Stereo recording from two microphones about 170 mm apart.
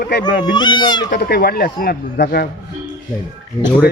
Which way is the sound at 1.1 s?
65° left (ahead or behind).